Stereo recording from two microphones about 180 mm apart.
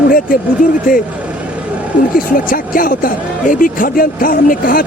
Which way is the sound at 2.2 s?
50° left (ahead or behind).